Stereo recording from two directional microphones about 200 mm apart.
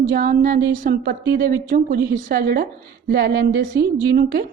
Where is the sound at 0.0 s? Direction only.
45° right (ahead or behind).